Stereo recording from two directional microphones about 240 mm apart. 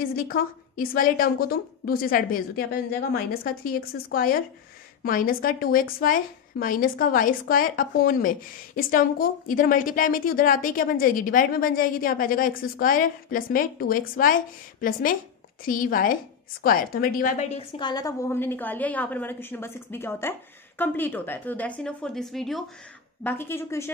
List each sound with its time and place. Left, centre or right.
0.1 s a woman's voice: left; by 23.9 s centre